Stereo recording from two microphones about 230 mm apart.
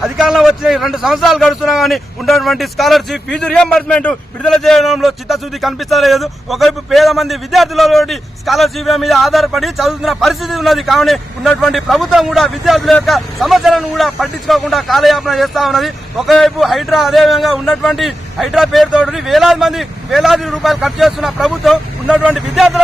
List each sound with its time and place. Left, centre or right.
0.0 s a man's voice: centre